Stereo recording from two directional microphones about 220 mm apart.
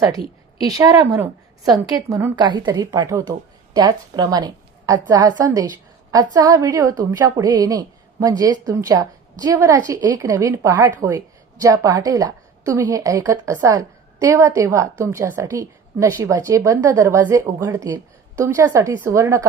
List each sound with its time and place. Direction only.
0.6 s a woman's voice: 15° right (ahead or behind)